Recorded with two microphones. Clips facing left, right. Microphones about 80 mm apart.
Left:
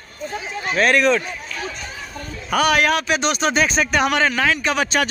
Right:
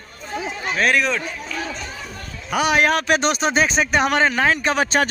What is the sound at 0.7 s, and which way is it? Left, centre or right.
Speech, centre.